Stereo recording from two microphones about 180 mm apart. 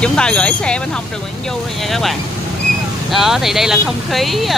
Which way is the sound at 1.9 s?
Centre (ahead or behind).